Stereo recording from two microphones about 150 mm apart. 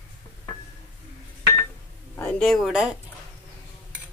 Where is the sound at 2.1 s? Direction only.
15° left (ahead or behind).